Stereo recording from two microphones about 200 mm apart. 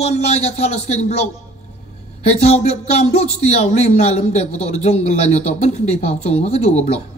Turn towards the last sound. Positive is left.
turn(degrees=30)  # may be behind; listen again after turning